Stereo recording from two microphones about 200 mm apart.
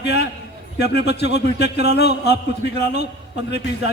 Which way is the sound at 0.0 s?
60° left (ahead or behind).